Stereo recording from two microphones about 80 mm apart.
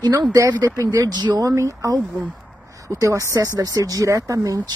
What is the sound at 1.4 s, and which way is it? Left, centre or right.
Speech, right.